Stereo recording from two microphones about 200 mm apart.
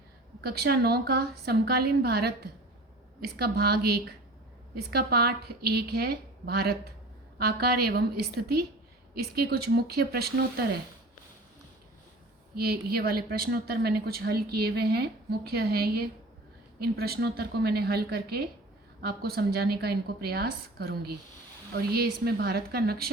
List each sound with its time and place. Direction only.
0.4 s a woman's voice: 50° right (ahead or behind)
12.5 s a woman's voice: 50° right (ahead or behind)
21.9 s a woman's voice: 50° right (ahead or behind)